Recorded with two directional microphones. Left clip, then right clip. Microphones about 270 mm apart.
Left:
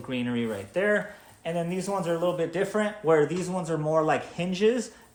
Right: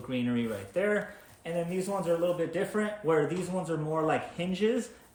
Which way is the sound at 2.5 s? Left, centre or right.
Left.